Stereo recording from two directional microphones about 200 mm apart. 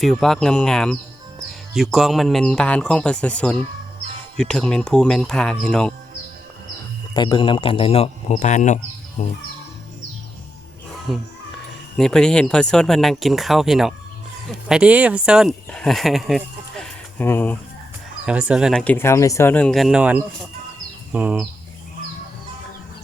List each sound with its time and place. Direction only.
0.0 s speech: centre (ahead or behind)
7.1 s speech: 20° left (ahead or behind); by 9.2 s 35° left (ahead or behind)
11.1 s speech: centre (ahead or behind)
18.3 s speech: 5° right (ahead or behind)
21.1 s bird: 5° right (ahead or behind)